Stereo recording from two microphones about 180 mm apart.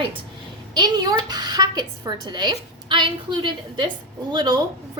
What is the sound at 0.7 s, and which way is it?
A woman's voice, 25° right (ahead or behind).